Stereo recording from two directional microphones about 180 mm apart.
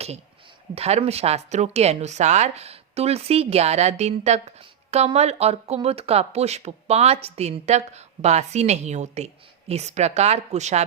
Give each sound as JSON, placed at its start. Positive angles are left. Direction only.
{"t": 0.8, "sound": "speech", "side_deg": -35}